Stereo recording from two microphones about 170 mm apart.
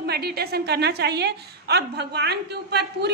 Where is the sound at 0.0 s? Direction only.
70° right (ahead or behind).